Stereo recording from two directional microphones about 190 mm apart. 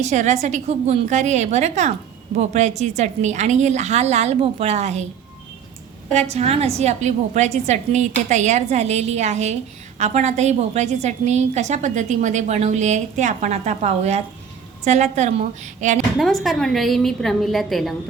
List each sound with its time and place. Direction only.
0.0 s a woman's voice: 40° right (ahead or behind)
6.1 s a woman's voice: 35° right (ahead or behind)
16.1 s a woman's voice: centre (ahead or behind)